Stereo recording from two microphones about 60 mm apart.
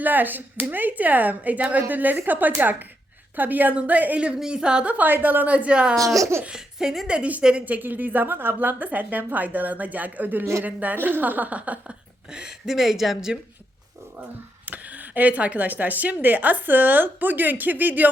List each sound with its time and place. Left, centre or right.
0.0 s a woman's voice: right
6.1 s speech: right
6.7 s a woman's voice: centre
7.1 s speech: right
12.3 s speech: centre
14.6 s speech: right